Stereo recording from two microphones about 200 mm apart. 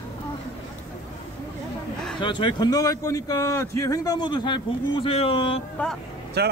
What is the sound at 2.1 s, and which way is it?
A man's voice, 25° left (ahead or behind).